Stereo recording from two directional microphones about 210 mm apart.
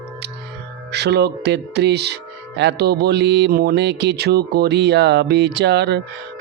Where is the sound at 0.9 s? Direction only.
50° right (ahead or behind).